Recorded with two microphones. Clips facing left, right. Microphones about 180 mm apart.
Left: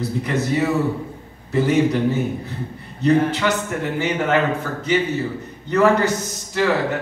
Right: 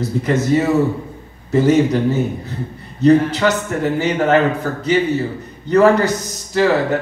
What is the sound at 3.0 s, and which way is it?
Speech, 40° right (ahead or behind).